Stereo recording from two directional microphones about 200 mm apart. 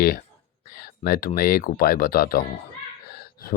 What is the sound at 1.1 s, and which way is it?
Speech, 45° left (ahead or behind).